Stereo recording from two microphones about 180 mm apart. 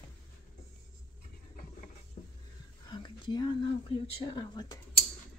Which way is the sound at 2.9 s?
25° left (ahead or behind).